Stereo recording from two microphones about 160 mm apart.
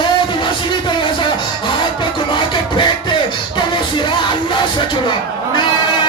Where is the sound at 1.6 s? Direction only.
30° left (ahead or behind).